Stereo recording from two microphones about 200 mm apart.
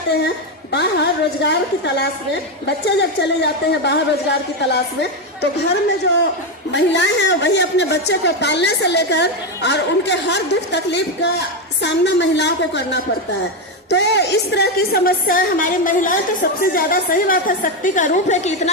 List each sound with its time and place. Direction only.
0.7 s a woman's voice: 60° left (ahead or behind)
6.7 s a woman's voice: 60° left (ahead or behind); by 18.7 s 35° left (ahead or behind)